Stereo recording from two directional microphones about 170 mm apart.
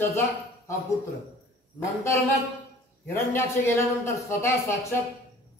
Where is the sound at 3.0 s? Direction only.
15° left (ahead or behind).